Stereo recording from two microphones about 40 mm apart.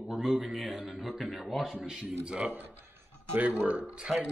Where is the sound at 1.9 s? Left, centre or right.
Centre.